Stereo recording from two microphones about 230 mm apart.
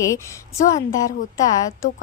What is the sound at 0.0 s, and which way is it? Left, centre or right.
A woman's voice, centre.